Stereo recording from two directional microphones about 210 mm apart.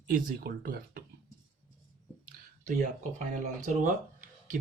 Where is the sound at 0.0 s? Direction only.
40° right (ahead or behind).